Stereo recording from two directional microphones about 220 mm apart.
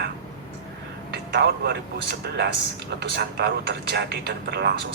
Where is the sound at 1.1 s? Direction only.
50° right (ahead or behind).